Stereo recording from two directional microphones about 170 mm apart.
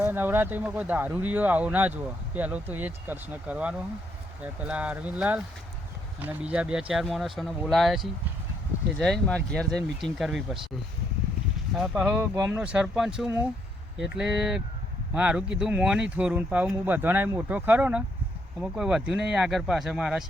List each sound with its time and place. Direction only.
0.0 s speech: 10° right (ahead or behind)
11.8 s speech: 5° right (ahead or behind)
12.1 s speech: 20° right (ahead or behind)
12.5 s speech: 10° right (ahead or behind)